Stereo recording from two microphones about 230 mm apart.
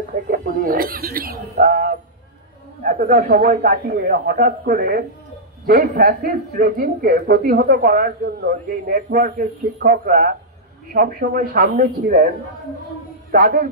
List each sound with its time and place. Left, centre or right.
0.3 s speech: right
13.3 s speech: right